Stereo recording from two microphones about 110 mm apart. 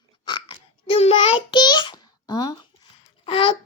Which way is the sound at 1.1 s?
40° left (ahead or behind).